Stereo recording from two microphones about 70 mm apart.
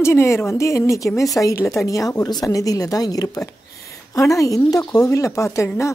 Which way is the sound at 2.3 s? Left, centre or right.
Left.